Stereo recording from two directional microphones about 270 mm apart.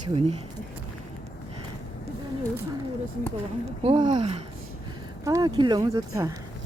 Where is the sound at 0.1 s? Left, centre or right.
Right.